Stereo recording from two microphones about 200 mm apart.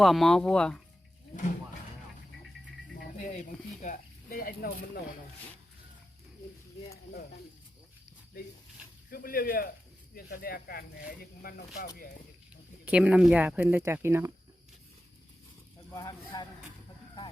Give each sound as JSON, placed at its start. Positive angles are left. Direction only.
{"t": 0.0, "sound": "speech", "side_deg": 0}
{"t": 3.2, "sound": "speech", "side_deg": 35}
{"t": 9.0, "sound": "speech", "side_deg": 45}
{"t": 12.8, "sound": "speech", "side_deg": -5}
{"t": 15.9, "sound": "speech", "side_deg": 20}